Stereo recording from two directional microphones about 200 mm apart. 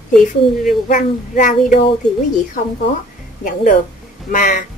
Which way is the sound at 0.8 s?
40° left (ahead or behind).